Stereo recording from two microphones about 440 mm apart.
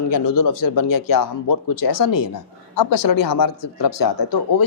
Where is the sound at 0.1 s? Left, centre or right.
Left.